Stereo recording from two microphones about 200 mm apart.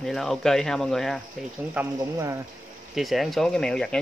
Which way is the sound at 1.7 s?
15° right (ahead or behind).